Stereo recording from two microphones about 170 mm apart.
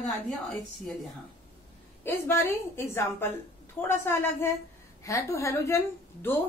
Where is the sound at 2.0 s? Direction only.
15° left (ahead or behind).